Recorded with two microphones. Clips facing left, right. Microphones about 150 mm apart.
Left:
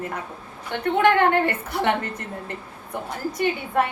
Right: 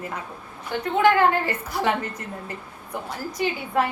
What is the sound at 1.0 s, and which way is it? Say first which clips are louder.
Speech: even; 65° left (ahead or behind).